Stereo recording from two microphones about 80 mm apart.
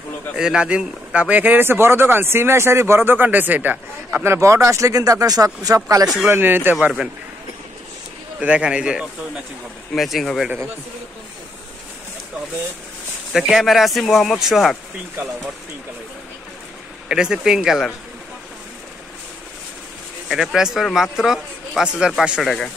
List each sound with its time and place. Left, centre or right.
0.4 s speech: centre
4.3 s speech: right
6.2 s speech: right
8.4 s speech: centre
9.9 s speech: centre
13.3 s speech: centre
17.1 s speech: centre
20.2 s speech: centre